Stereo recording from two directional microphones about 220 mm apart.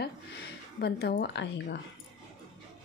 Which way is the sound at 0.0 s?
50° left (ahead or behind).